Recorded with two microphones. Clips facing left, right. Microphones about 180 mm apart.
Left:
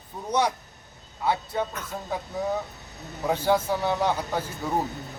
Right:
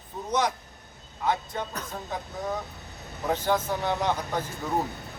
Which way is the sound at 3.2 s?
10° left (ahead or behind).